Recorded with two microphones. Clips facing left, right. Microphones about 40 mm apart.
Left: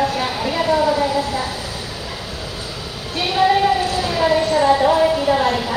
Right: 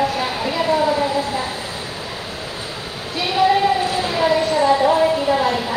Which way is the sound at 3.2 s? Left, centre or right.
Centre.